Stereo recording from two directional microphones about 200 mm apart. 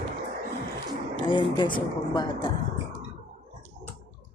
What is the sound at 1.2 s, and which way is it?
Speech, 25° left (ahead or behind).